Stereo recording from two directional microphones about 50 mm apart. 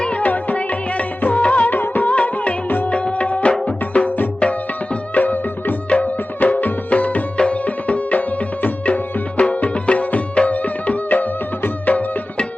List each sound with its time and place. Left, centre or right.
0.0 s music: left
1.7 s music: left
2.9 s music: left
5.2 s music: left